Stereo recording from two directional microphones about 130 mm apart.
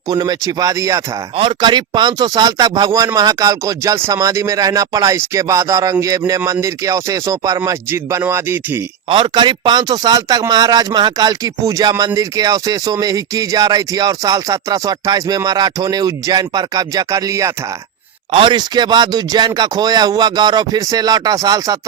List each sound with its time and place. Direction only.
0.1 s a man's voice: 30° right (ahead or behind)
1.4 s a man's voice: 40° right (ahead or behind); by 8.8 s 20° right (ahead or behind)
9.0 s a man's voice: 40° right (ahead or behind)
18.3 s speech: 40° right (ahead or behind)